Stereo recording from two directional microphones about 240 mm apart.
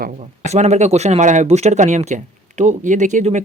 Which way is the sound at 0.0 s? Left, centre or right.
Right.